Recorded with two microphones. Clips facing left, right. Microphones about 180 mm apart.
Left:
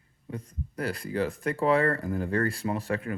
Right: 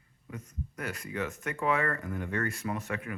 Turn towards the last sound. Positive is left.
turn(degrees=30)  # may be behind; listen again after turning